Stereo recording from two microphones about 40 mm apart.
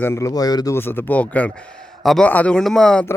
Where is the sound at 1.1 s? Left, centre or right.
Left.